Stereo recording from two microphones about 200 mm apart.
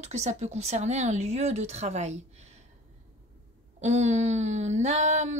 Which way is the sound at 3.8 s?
35° right (ahead or behind).